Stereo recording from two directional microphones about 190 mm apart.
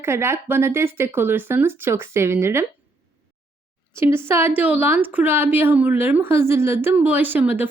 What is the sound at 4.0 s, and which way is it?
Speech, 10° right (ahead or behind).